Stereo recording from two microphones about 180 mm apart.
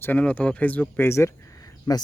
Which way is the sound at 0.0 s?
10° left (ahead or behind).